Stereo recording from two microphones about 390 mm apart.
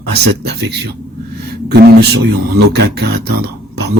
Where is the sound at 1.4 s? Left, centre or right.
Right.